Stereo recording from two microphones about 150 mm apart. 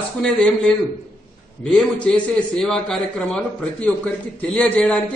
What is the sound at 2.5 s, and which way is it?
A man's voice, 5° left (ahead or behind).